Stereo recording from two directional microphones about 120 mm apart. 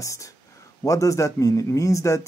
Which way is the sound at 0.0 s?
25° left (ahead or behind).